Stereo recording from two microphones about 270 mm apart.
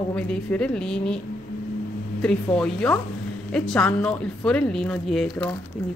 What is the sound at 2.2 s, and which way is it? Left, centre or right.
A woman's voice, centre.